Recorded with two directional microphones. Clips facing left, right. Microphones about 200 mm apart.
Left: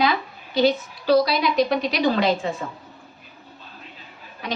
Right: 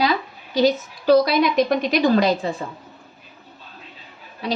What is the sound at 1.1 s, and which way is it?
A woman's voice, 50° right (ahead or behind).